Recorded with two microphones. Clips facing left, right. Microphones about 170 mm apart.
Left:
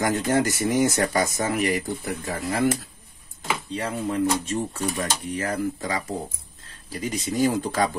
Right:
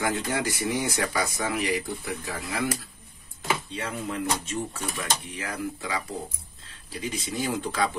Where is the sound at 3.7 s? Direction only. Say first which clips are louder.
Left 5 dB; 40° left (ahead or behind).